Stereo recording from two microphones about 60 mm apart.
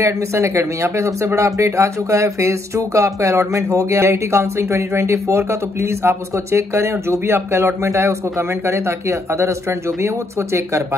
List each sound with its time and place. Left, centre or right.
0.0 s speech: right